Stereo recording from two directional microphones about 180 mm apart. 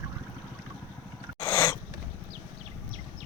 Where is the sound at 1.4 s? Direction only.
15° left (ahead or behind).